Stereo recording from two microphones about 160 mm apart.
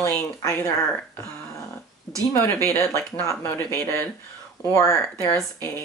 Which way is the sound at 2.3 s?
15° left (ahead or behind).